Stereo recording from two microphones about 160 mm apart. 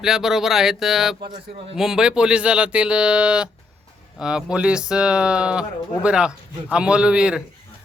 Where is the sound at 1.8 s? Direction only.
5° right (ahead or behind).